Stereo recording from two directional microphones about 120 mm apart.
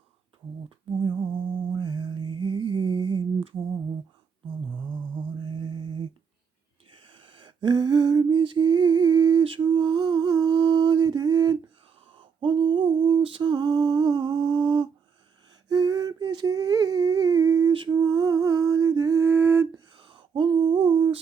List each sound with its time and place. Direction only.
1.0 s music: 40° right (ahead or behind)
4.7 s mantra: 40° right (ahead or behind)
7.1 s lullaby: 45° right (ahead or behind)
9.4 s mantra: 45° right (ahead or behind)
12.1 s a sound: 45° right (ahead or behind)
17.7 s a sound: 40° right (ahead or behind); by 19.6 s 20° right (ahead or behind)
19.7 s humming: 45° right (ahead or behind)